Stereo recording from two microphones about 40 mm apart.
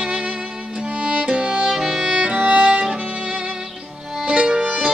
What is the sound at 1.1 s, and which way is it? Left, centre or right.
Music, right.